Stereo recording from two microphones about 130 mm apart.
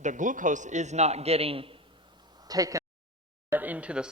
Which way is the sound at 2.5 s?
25° right (ahead or behind).